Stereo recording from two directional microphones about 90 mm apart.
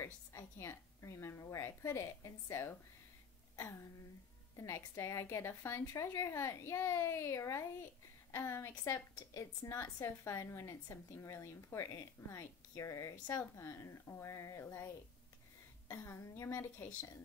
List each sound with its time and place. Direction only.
0.0 s a woman's voice: 35° left (ahead or behind)
4.6 s a woman's voice: 30° left (ahead or behind)
16.0 s a woman's voice: 30° left (ahead or behind)